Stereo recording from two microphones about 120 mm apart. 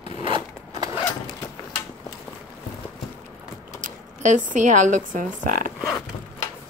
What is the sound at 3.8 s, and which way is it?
Speech, 90° right.